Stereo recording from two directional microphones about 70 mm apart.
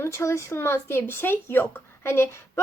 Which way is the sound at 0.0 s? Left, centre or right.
Left.